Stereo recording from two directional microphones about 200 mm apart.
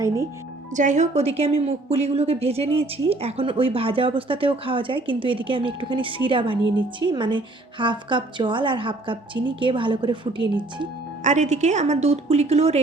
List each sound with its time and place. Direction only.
0.7 s a woman's voice: 40° right (ahead or behind)
11.2 s speech: 35° right (ahead or behind)